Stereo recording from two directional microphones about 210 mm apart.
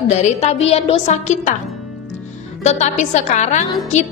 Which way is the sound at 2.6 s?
30° left (ahead or behind).